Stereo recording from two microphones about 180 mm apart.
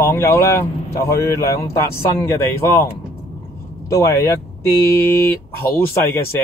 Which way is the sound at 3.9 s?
20° left (ahead or behind).